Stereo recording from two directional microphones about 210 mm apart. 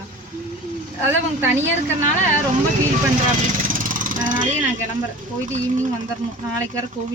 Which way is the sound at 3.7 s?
40° right (ahead or behind).